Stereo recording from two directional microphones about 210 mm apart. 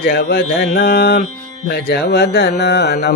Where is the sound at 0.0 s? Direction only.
50° left (ahead or behind).